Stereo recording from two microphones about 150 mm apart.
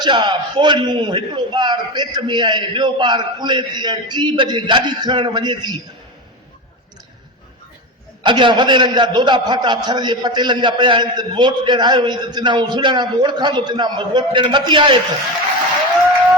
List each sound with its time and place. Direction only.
0.0 s a man's voice: 30° right (ahead or behind)
8.2 s a man's voice: 30° right (ahead or behind)